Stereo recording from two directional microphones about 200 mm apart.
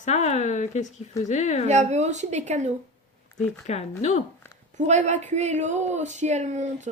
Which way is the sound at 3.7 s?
35° left (ahead or behind).